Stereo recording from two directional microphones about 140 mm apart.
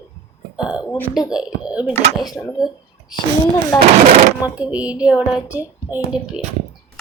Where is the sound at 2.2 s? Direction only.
25° left (ahead or behind).